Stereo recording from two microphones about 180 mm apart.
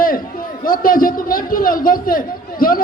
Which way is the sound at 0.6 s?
50° left (ahead or behind).